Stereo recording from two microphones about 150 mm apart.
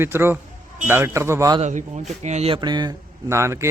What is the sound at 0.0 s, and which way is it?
A man's voice, 15° right (ahead or behind).